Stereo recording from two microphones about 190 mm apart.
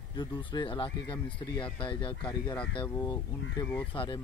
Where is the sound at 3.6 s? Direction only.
10° left (ahead or behind).